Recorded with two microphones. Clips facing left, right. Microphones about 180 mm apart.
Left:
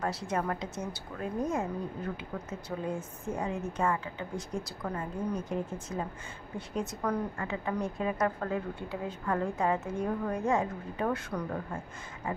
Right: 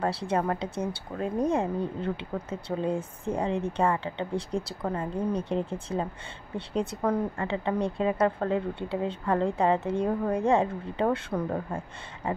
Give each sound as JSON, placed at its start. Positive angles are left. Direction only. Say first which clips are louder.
{"t": 0.0, "sound": "a woman's voice", "louder": "right 5 dB", "side_deg": -30}